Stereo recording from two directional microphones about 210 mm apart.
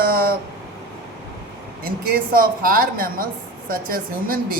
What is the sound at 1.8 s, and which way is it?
Speech, 45° right (ahead or behind).